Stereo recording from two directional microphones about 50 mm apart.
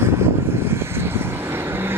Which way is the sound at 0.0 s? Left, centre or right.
Right.